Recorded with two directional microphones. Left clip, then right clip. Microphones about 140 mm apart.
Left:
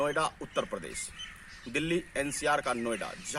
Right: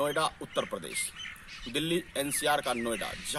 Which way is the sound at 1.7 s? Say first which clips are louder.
Even; 50° left (ahead or behind).